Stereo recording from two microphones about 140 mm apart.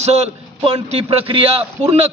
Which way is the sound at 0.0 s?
50° right (ahead or behind).